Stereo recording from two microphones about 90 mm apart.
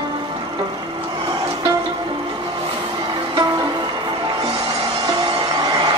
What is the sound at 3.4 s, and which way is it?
Music, 55° right (ahead or behind).